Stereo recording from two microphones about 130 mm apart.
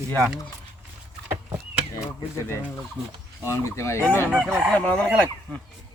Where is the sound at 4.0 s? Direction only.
15° right (ahead or behind).